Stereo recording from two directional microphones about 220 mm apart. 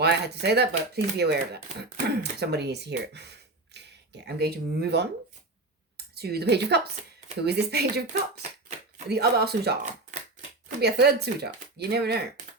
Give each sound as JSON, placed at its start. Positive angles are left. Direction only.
{"t": 0.0, "sound": "speech", "side_deg": -50}
{"t": 6.1, "sound": "speech", "side_deg": -45}
{"t": 9.0, "sound": "speech", "side_deg": -45}
{"t": 10.8, "sound": "speech", "side_deg": -45}